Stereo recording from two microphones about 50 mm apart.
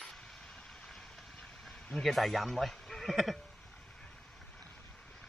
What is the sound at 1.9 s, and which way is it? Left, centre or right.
Speech, centre.